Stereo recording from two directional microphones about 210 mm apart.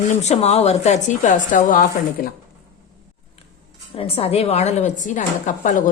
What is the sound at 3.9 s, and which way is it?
A woman's voice, 25° left (ahead or behind).